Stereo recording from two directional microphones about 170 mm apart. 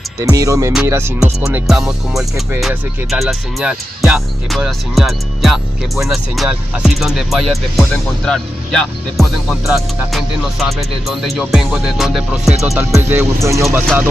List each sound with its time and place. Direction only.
0.2 s speech: 20° right (ahead or behind)
0.8 s music: 15° right (ahead or behind)
2.6 s speech: centre (ahead or behind)
12.9 s music: 15° right (ahead or behind)